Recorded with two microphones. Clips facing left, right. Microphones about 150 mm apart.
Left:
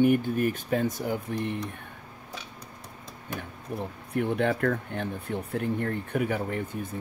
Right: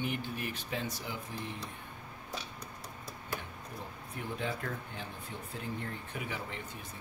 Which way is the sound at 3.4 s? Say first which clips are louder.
Left 10 dB; 65° left (ahead or behind).